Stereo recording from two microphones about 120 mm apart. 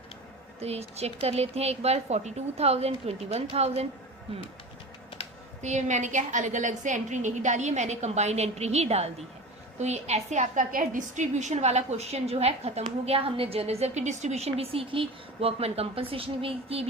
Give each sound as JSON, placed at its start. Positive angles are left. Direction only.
{"t": 0.6, "sound": "a woman's voice", "side_deg": -60}
{"t": 5.6, "sound": "a woman's voice", "side_deg": -80}